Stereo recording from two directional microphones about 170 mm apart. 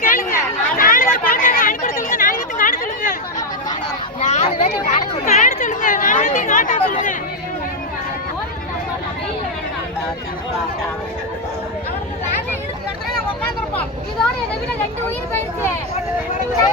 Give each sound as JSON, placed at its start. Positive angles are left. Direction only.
{"t": 0.0, "sound": "chatter", "side_deg": 55}
{"t": 4.2, "sound": "a sound", "side_deg": 45}
{"t": 4.4, "sound": "chatter", "side_deg": 40}